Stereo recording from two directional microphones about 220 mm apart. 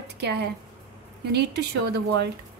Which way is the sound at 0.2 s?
50° right (ahead or behind).